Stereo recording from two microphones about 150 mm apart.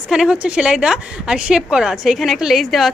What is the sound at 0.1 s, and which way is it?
A woman's voice, 5° right (ahead or behind).